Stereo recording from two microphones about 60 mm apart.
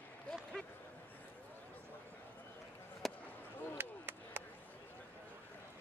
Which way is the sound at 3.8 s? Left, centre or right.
Right.